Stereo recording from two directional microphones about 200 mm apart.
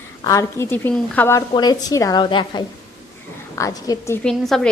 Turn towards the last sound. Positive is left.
turn(degrees=0)  # may be behind; listen again after turning